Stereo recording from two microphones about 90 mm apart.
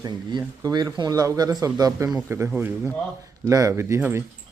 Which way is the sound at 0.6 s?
50° right (ahead or behind).